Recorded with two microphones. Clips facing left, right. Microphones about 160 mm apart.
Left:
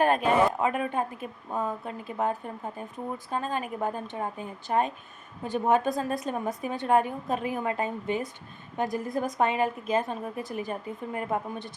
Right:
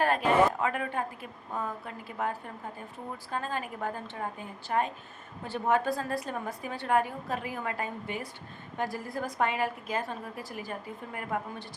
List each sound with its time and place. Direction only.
0.0 s a woman's voice: 20° left (ahead or behind)